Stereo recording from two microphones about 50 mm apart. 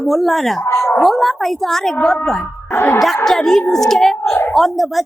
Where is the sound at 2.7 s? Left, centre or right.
Left.